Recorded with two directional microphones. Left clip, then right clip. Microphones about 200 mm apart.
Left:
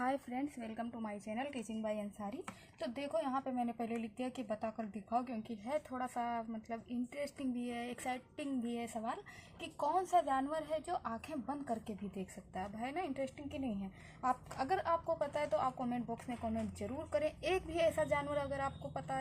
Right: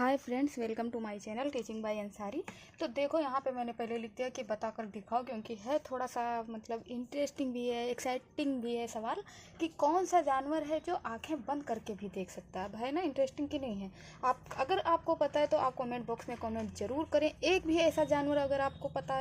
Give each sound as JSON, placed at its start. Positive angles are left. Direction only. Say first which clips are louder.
{"t": 0.0, "sound": "a woman's voice", "louder": "right 6 dB", "side_deg": -45}
{"t": 3.8, "sound": "a woman's voice", "louder": "right 4 dB", "side_deg": -40}